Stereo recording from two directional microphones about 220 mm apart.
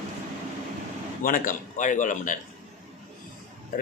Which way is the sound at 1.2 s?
40° left (ahead or behind).